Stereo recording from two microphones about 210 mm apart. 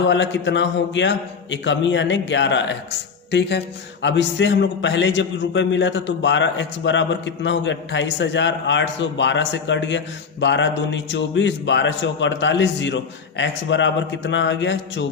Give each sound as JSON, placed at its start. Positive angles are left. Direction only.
{"t": 0.0, "sound": "a man's voice", "side_deg": 60}
{"t": 4.0, "sound": "a man's voice", "side_deg": 60}